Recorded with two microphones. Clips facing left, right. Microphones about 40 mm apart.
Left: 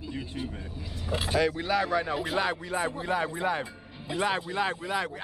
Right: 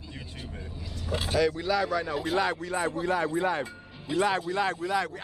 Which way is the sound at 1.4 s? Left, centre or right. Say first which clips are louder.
Right 2 dB; left.